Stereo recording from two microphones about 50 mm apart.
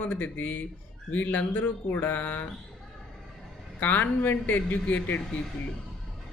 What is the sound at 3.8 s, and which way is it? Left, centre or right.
Speech, left.